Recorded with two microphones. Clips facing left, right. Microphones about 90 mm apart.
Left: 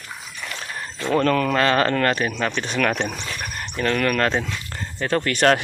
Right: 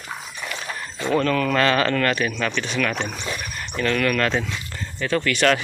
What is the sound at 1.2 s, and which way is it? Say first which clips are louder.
Speech: left 4 dB; 45° left (ahead or behind).